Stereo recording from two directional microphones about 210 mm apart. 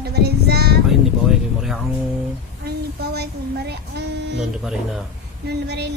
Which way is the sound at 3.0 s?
50° right (ahead or behind).